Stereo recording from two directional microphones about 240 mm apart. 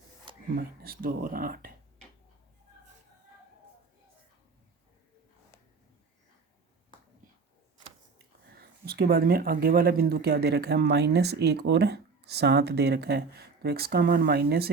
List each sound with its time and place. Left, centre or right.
0.5 s speech: right
8.4 s speech: right